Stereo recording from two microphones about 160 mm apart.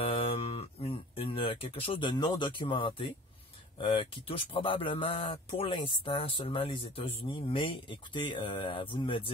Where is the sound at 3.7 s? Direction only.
35° left (ahead or behind).